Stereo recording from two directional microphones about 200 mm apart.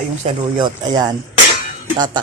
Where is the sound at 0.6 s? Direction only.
20° right (ahead or behind).